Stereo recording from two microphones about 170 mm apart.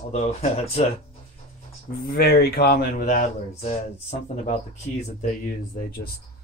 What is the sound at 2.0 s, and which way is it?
Speech, 65° left (ahead or behind).